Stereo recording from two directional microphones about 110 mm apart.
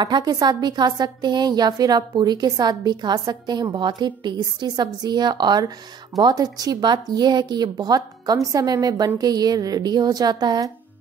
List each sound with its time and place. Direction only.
0.0 s a woman's voice: 40° right (ahead or behind)